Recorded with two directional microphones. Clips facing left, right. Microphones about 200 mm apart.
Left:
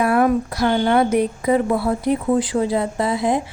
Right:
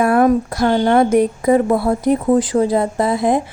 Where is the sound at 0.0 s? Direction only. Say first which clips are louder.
Right 3 dB; 45° right (ahead or behind).